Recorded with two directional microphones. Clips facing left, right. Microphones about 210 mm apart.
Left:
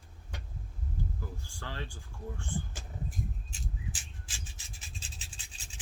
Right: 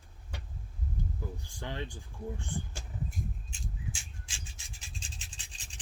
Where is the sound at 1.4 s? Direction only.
20° right (ahead or behind).